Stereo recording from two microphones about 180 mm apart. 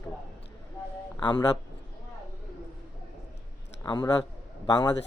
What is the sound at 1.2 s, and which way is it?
Speech, 25° left (ahead or behind).